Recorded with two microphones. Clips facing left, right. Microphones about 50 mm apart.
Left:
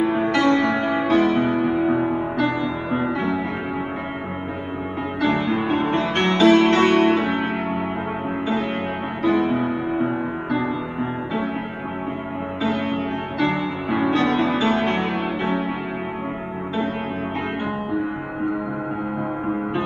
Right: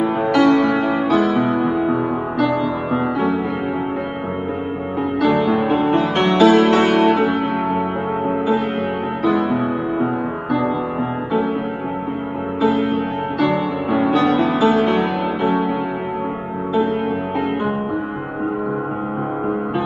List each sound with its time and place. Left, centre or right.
0.4 s music: left
1.8 s music: left
2.9 s music: right
5.4 s music: right
5.7 s music: left
12.6 s music: left